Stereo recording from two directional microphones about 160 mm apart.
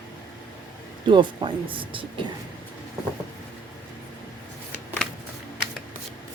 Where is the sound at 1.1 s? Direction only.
30° right (ahead or behind).